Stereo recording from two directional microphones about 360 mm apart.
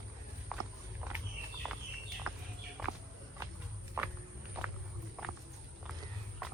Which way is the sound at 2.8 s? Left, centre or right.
Centre.